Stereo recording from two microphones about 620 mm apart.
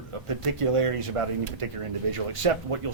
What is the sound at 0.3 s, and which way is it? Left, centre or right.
Speech, right.